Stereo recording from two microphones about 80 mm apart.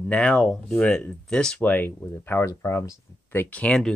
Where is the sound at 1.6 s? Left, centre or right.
Left.